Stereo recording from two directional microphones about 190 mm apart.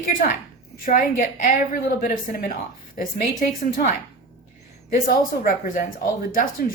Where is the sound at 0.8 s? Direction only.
45° left (ahead or behind).